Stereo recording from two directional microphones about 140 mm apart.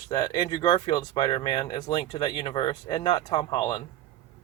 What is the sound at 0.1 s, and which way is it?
Speech, 30° left (ahead or behind).